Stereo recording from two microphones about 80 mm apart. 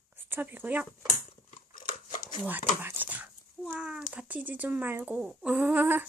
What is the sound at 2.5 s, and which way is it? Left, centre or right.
Speech, right.